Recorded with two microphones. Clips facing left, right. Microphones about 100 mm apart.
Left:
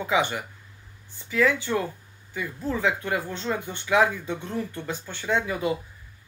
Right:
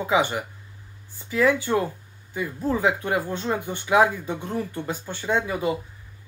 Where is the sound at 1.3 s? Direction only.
15° right (ahead or behind).